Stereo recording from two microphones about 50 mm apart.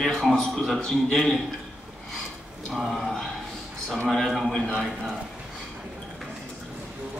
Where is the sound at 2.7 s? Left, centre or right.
Centre.